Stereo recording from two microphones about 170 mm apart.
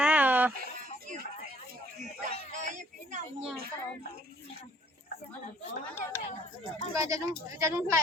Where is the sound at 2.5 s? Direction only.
45° right (ahead or behind).